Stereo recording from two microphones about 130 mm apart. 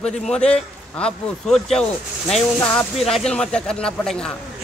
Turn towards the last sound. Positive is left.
turn(degrees=5)  # may be behind; listen again after turning